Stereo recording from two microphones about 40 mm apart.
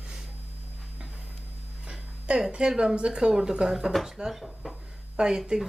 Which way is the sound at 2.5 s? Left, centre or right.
Right.